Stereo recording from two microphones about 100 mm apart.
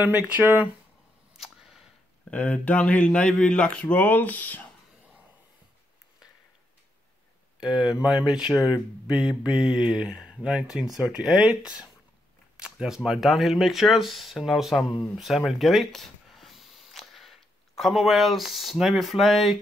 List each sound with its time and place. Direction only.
0.0 s speech: 15° right (ahead or behind)
1.3 s a sound: 5° right (ahead or behind)
2.3 s speech: 15° left (ahead or behind)
7.6 s speech: 5° right (ahead or behind)
12.5 s speech: 5° right (ahead or behind)